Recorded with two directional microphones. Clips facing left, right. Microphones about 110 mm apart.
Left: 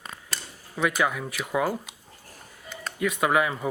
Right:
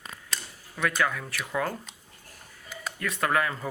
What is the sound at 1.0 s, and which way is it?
Speech, 15° left (ahead or behind).